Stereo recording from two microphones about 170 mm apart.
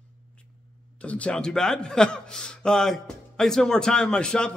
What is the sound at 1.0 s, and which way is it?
A man's voice, 5° left (ahead or behind).